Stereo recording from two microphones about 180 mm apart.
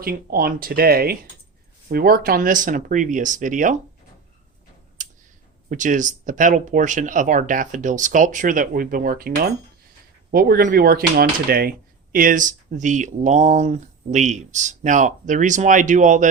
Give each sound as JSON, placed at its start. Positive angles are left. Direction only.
{"t": 0.0, "sound": "speech", "side_deg": -55}
{"t": 5.6, "sound": "speech", "side_deg": -45}